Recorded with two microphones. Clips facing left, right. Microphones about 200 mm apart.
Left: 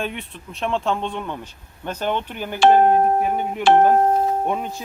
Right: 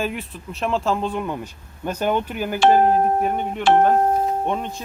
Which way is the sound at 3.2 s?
5° left (ahead or behind).